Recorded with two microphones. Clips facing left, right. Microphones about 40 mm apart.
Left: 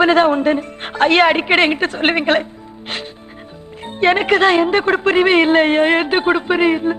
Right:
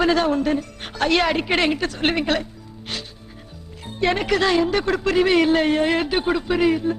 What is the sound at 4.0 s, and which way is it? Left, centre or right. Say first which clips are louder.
Speech: left 7 dB; left.